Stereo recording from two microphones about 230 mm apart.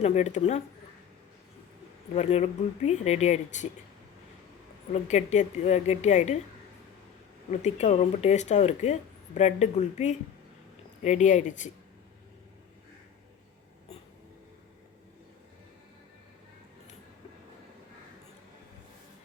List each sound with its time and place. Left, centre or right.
0.0 s speech: left
2.1 s speech: left
5.0 s speech: left
7.6 s speech: left